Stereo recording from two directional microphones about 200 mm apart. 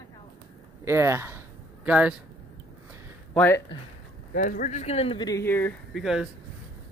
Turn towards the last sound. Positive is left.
turn(degrees=0)  # may be behind; listen again after turning